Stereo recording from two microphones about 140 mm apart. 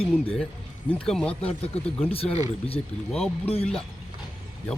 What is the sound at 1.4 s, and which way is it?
Speech, 45° left (ahead or behind).